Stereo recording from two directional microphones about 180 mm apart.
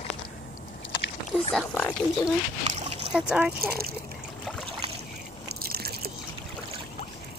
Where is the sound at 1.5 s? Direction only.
5° left (ahead or behind).